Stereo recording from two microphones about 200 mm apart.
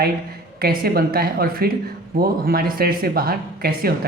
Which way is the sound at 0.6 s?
50° right (ahead or behind).